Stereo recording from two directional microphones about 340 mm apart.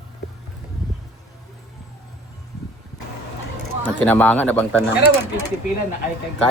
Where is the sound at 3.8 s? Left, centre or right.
Centre.